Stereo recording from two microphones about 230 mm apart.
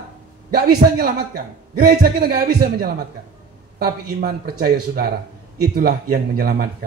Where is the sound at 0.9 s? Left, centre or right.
Right.